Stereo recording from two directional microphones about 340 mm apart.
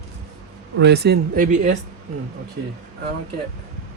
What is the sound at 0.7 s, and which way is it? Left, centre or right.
Speech, right.